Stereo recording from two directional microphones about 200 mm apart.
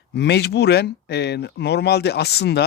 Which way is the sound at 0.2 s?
55° left (ahead or behind).